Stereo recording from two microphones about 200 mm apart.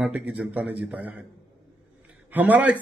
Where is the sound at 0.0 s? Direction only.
10° right (ahead or behind).